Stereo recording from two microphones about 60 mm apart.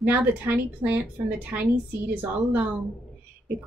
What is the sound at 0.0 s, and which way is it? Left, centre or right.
Speech, right.